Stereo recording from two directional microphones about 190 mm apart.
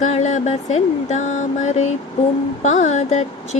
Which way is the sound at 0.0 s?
40° left (ahead or behind).